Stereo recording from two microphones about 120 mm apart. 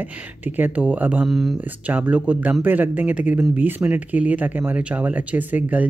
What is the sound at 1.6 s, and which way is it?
Speech, 15° right (ahead or behind).